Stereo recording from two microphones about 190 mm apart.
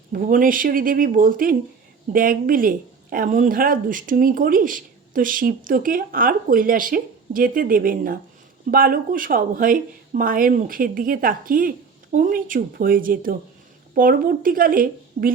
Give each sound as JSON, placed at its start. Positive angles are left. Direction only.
{"t": 0.1, "sound": "speech", "side_deg": -45}